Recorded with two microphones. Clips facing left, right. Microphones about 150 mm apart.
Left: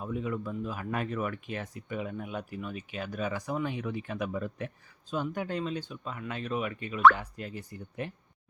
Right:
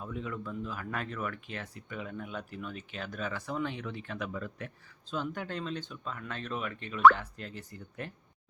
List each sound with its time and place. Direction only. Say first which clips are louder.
0.0 s speech: left 5 dB; 15° left (ahead or behind)